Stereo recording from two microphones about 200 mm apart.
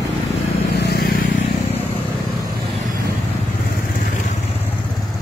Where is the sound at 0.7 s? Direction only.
50° left (ahead or behind).